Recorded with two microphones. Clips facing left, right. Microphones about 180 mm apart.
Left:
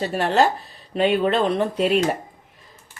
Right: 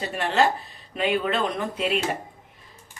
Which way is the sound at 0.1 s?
40° left (ahead or behind).